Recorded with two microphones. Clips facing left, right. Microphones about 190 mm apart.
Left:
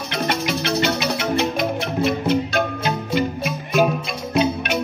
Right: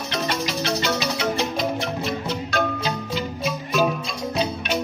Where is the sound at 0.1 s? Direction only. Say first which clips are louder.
Left 3 dB; 55° left (ahead or behind).